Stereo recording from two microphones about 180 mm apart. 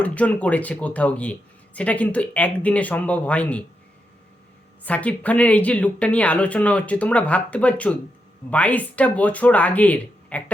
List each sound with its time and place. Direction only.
0.0 s speech: 10° left (ahead or behind)
4.9 s speech: 10° left (ahead or behind)